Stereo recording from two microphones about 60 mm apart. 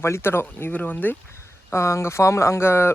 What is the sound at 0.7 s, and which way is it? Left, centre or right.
Speech, left.